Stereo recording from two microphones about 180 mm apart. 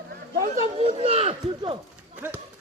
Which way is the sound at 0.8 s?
35° right (ahead or behind).